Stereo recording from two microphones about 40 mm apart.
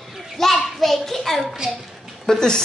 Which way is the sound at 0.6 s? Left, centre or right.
Centre.